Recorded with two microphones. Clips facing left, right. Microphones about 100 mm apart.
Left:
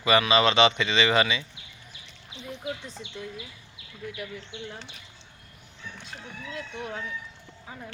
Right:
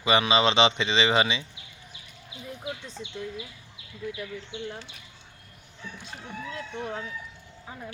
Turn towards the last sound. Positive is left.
turn(degrees=-30)  # may be behind; listen again after turning